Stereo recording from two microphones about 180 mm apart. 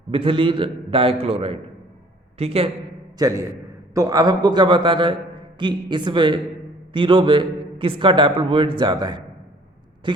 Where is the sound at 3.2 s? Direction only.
15° right (ahead or behind).